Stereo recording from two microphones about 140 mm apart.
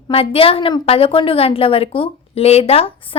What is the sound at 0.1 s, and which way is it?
A woman's voice, 40° left (ahead or behind).